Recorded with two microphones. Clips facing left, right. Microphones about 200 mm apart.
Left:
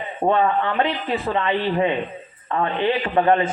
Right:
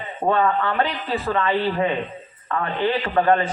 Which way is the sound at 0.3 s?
20° left (ahead or behind).